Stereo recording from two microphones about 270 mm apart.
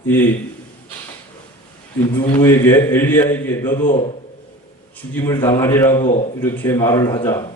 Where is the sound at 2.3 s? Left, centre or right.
Centre.